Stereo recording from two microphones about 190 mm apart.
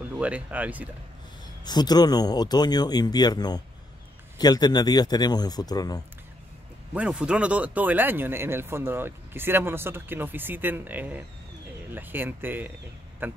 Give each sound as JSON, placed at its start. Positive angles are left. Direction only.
{"t": 0.0, "sound": "speech", "side_deg": -10}
{"t": 1.6, "sound": "speech", "side_deg": 20}
{"t": 6.9, "sound": "speech", "side_deg": -5}